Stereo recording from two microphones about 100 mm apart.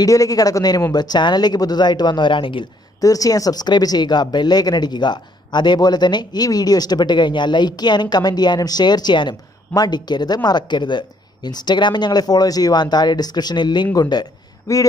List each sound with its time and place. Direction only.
0.0 s speech: 35° left (ahead or behind); by 2.6 s 55° left (ahead or behind)
3.0 s speech: 35° left (ahead or behind)
14.7 s speech: 35° left (ahead or behind)